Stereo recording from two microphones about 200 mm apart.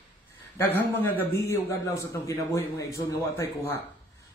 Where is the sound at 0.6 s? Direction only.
10° left (ahead or behind).